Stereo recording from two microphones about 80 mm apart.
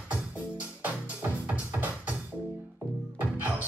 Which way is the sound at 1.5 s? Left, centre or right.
Right.